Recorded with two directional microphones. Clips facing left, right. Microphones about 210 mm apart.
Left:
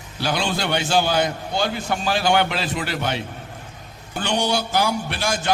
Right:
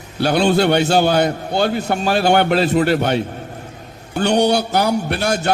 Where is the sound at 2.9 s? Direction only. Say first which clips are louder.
Right 9 dB; 55° right (ahead or behind).